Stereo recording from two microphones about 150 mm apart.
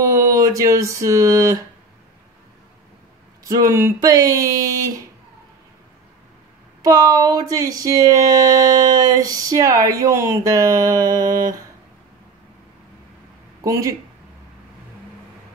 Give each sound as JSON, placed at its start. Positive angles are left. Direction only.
{"t": 0.0, "sound": "a sound", "side_deg": -20}
{"t": 3.4, "sound": "speech", "side_deg": -20}
{"t": 6.8, "sound": "speech", "side_deg": -25}
{"t": 13.6, "sound": "speech", "side_deg": -20}